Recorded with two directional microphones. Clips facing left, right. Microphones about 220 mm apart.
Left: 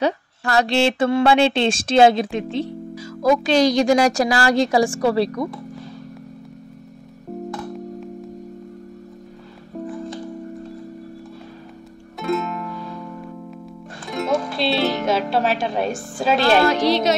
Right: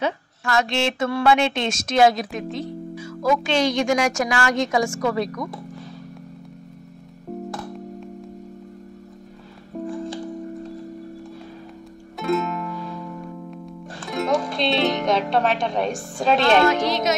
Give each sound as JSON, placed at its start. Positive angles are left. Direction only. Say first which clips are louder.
{"t": 0.0, "sound": "speech", "louder": "left 4 dB", "side_deg": 35}
{"t": 12.2, "sound": "music", "louder": "even", "side_deg": 0}
{"t": 16.8, "sound": "speech", "louder": "left 4 dB", "side_deg": 30}